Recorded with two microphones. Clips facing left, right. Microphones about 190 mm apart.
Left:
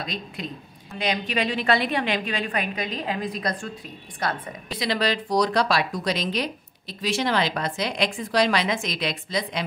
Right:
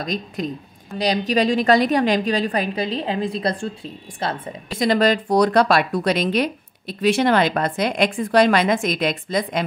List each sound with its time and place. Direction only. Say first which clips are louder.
0.0 s a woman's voice: right 7 dB; 45° right (ahead or behind); by 4.6 s 25° right (ahead or behind)
4.6 s a woman's voice: right 7 dB; 45° right (ahead or behind)